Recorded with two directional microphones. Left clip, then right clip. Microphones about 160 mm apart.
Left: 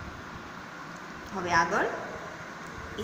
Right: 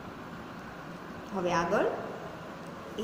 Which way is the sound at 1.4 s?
15° right (ahead or behind).